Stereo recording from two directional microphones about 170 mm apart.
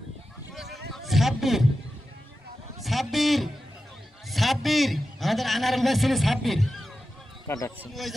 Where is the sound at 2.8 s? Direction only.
Centre (ahead or behind).